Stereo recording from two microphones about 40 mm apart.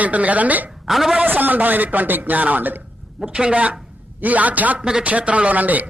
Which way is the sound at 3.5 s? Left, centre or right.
Right.